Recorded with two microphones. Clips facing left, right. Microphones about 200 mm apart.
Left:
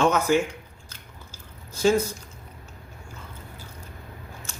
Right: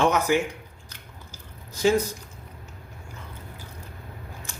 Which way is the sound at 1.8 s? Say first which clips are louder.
Left 1 dB; 15° right (ahead or behind).